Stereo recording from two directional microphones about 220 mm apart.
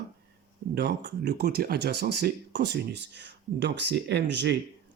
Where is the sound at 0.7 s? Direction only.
50° right (ahead or behind).